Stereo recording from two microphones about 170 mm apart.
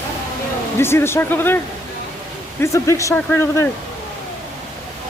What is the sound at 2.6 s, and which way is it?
Speech, 20° left (ahead or behind).